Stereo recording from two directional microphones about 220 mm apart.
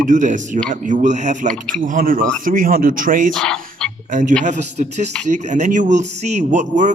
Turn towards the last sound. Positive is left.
turn(degrees=-35)  # may be behind; listen again after turning